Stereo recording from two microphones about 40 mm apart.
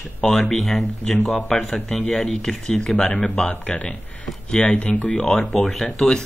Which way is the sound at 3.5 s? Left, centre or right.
Left.